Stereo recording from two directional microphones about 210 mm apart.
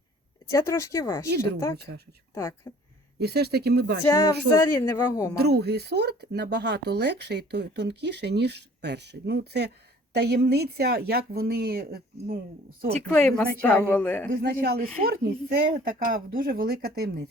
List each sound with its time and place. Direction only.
0.5 s speech: 15° left (ahead or behind)
2.3 s speech: 10° left (ahead or behind)
3.2 s speech: 50° right (ahead or behind)
4.0 s speech: 15° left (ahead or behind)
5.4 s speech: 50° right (ahead or behind)
13.1 s a woman's voice: 5° left (ahead or behind)
14.4 s speech: 50° right (ahead or behind)